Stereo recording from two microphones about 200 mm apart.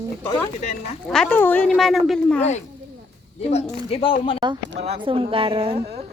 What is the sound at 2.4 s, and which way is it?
Speech, 35° left (ahead or behind).